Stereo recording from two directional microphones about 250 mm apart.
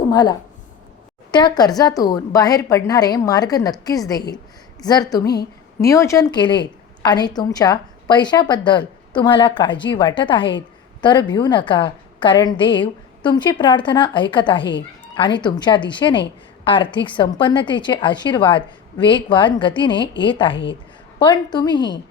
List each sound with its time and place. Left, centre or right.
0.1 s a woman's voice: centre
14.6 s speech: left
15.1 s a woman's voice: centre